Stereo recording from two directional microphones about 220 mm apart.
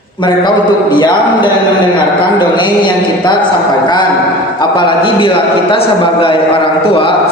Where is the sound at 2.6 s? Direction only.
20° left (ahead or behind).